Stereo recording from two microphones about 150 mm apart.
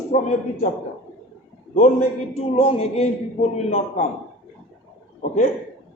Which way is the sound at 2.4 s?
40° left (ahead or behind).